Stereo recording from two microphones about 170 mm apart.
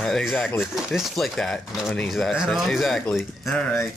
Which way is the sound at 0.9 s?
Centre (ahead or behind).